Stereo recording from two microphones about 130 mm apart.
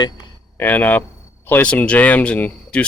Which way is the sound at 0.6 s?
15° left (ahead or behind).